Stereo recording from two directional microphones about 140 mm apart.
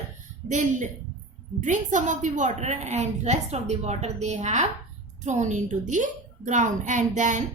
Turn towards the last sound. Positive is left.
turn(degrees=-60)  # may be behind; listen again after turning